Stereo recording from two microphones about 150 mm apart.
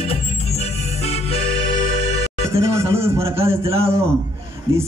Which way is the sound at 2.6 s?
20° right (ahead or behind).